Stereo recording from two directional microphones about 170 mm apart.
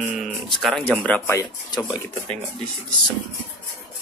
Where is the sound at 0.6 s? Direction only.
Centre (ahead or behind); by 2.0 s 20° left (ahead or behind).